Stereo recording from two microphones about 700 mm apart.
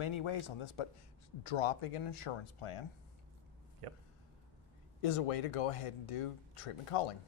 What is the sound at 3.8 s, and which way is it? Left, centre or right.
Speech, right.